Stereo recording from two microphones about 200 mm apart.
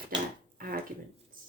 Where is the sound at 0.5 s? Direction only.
45° right (ahead or behind).